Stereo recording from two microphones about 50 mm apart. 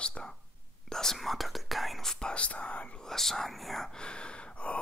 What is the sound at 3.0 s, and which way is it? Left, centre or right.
Speech, centre.